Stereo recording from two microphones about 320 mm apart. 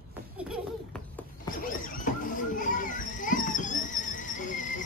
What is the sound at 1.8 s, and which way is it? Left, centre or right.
Children playing, left.